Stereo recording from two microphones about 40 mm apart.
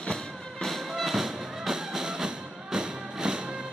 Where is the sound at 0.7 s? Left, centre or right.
Centre.